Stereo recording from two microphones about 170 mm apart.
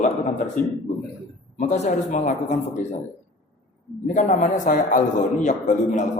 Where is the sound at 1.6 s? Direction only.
45° left (ahead or behind).